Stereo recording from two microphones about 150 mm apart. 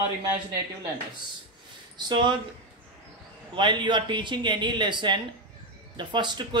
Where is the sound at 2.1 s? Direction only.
30° right (ahead or behind).